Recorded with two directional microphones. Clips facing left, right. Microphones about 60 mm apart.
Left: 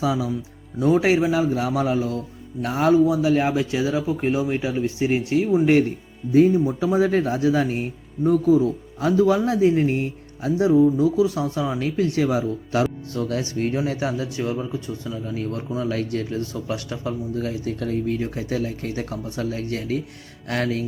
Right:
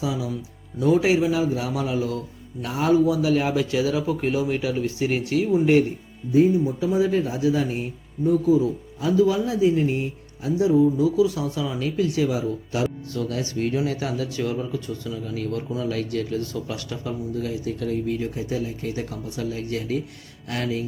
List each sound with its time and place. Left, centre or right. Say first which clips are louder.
0.0 s speech: left 4 dB; left
0.8 s a man's voice: left 1 dB; left
6.7 s a man's voice: left 2 dB; left